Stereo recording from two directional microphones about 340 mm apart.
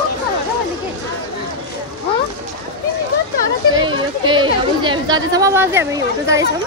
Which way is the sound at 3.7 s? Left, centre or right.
Centre.